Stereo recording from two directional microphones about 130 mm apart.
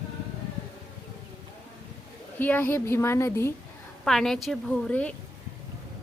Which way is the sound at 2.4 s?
15° left (ahead or behind).